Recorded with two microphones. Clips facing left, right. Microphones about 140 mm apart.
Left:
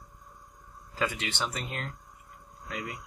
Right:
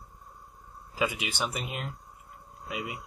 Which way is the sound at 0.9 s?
10° right (ahead or behind).